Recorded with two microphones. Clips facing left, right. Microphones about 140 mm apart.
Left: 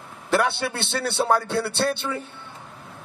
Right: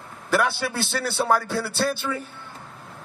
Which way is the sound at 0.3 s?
25° left (ahead or behind).